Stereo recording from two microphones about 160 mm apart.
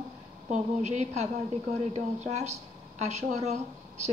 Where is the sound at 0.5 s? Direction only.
45° right (ahead or behind).